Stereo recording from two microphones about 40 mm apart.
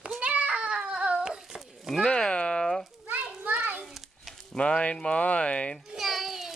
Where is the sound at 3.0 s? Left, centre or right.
Right.